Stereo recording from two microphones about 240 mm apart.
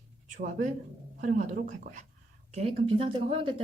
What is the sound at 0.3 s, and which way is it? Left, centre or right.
A woman's voice, right.